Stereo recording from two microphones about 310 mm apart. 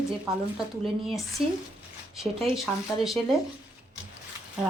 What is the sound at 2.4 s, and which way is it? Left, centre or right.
Speech, centre.